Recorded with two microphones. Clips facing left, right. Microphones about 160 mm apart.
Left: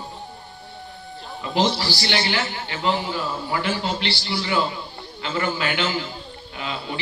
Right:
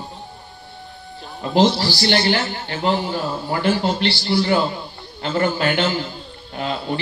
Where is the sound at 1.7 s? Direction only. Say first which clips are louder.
Right 5 dB; 40° right (ahead or behind).